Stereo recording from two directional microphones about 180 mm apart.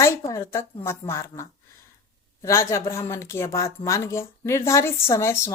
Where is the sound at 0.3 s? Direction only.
15° left (ahead or behind).